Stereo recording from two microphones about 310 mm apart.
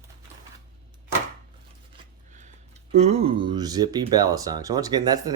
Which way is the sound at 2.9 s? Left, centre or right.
Right.